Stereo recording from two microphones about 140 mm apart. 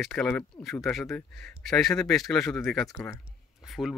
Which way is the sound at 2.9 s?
20° left (ahead or behind).